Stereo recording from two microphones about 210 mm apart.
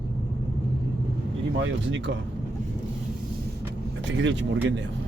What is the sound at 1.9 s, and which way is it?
Speech, 60° right (ahead or behind).